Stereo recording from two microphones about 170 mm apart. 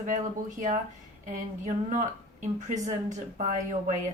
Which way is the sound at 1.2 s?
50° right (ahead or behind).